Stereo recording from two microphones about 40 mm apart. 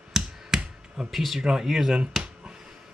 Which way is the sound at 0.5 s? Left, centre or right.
Centre.